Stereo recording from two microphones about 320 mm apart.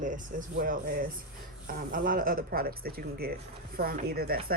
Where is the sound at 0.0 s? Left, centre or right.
Right.